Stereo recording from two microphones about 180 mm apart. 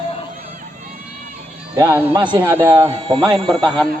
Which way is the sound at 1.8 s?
10° right (ahead or behind).